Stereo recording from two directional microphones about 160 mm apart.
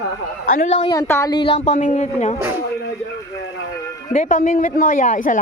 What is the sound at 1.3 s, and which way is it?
Speech, 30° left (ahead or behind).